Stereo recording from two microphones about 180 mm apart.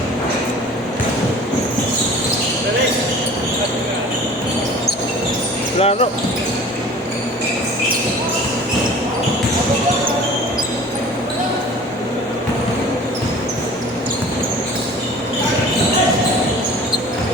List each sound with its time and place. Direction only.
5.8 s basketball bounce: 35° left (ahead or behind)